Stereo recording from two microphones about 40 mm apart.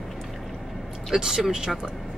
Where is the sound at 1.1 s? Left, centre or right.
Centre.